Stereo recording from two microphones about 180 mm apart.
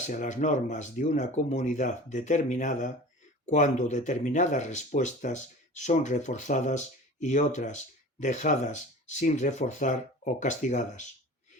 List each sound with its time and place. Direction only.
0.1 s speech: 45° left (ahead or behind)